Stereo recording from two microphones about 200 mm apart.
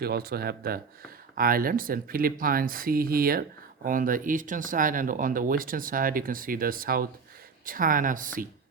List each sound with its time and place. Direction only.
0.0 s speech: 50° right (ahead or behind)